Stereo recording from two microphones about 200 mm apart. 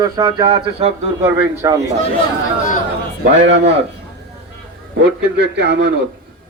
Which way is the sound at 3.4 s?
65° right (ahead or behind).